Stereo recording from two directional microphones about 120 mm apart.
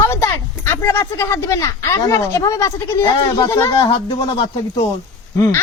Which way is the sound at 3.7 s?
45° left (ahead or behind).